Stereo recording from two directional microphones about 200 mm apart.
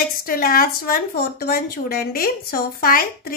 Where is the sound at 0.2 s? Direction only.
45° left (ahead or behind).